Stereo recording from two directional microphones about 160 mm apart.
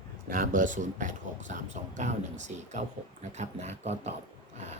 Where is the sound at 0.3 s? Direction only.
55° right (ahead or behind).